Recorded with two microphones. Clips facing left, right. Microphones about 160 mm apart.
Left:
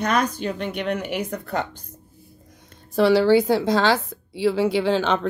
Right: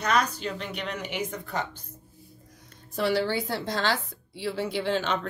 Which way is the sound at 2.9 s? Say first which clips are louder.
Left 10 dB; 90° left.